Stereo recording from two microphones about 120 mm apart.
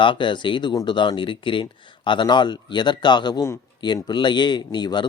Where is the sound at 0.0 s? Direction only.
40° left (ahead or behind).